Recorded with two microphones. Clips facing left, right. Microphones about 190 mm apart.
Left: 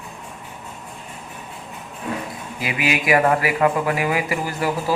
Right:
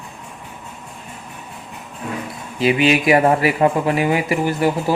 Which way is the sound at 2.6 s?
25° right (ahead or behind).